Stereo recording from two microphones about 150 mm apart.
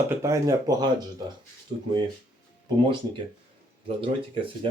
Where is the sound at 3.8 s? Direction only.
35° right (ahead or behind).